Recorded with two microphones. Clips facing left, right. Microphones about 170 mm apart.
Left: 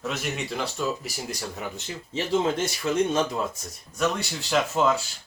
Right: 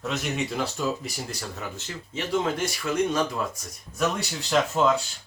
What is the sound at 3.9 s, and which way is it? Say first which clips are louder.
Speech: even; centre (ahead or behind).